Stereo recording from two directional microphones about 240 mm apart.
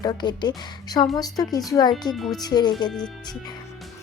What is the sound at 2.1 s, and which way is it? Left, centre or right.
Speech, centre.